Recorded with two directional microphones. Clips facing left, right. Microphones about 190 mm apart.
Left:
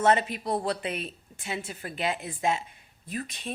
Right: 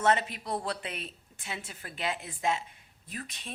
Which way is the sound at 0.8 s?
15° left (ahead or behind).